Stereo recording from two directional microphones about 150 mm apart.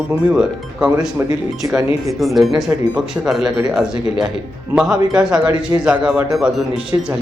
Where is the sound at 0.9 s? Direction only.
25° right (ahead or behind).